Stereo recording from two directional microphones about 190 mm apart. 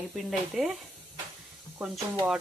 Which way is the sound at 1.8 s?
5° right (ahead or behind).